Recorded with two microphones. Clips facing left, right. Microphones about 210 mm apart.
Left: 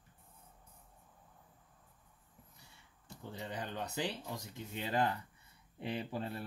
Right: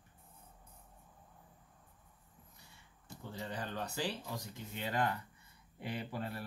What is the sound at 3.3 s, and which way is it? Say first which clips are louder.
Speech: right 1 dB; 20° left (ahead or behind).